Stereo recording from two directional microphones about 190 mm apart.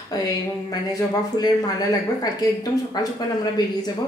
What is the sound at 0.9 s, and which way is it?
Speech, 20° left (ahead or behind).